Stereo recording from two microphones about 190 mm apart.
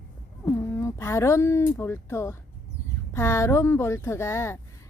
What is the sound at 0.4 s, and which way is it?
A woman's voice, 15° left (ahead or behind).